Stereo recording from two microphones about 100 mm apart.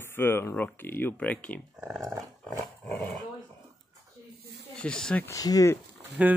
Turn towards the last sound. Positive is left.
turn(degrees=-10)  # may be behind; listen again after turning